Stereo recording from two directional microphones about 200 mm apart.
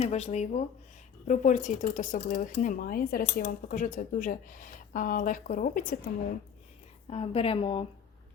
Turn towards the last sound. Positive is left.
turn(degrees=25)  # may be behind; listen again after turning